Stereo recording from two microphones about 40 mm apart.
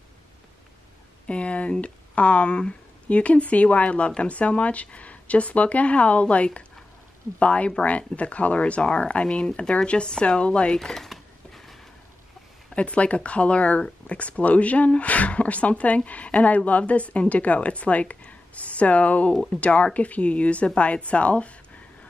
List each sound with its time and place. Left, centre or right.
1.2 s a woman's voice: left
10.8 s speech: centre
11.1 s a sound: centre
12.7 s a woman's voice: left